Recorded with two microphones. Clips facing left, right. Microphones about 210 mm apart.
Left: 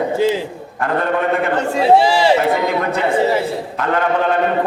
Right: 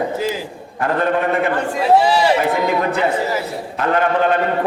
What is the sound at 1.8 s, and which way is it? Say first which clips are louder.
Speech: left 2 dB; 30° left (ahead or behind).